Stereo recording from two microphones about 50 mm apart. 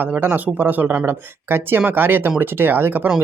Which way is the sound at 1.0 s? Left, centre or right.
Right.